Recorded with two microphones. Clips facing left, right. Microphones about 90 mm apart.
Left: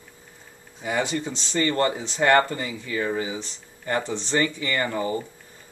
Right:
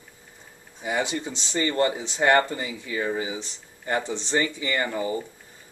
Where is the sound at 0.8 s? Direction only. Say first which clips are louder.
Left 1 dB; 15° right (ahead or behind).